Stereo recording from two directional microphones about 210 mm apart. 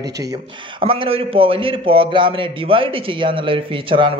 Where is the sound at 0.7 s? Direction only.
25° right (ahead or behind).